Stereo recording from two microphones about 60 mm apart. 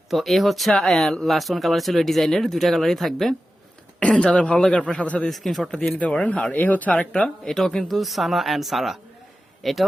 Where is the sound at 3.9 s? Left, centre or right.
Centre.